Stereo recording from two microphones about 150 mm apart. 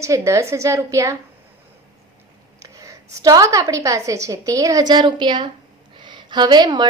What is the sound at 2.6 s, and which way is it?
A woman's voice, 20° right (ahead or behind).